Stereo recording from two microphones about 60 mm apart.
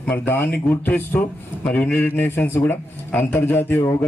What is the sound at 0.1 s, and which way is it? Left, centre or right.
Speech, left.